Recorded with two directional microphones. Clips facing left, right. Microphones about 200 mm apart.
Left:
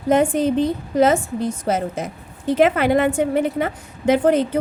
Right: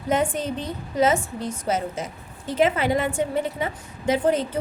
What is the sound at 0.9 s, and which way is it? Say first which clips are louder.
A woman's voice: left 4 dB; 60° left (ahead or behind).